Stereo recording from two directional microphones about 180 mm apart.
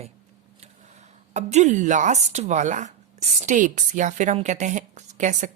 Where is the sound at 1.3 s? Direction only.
40° right (ahead or behind).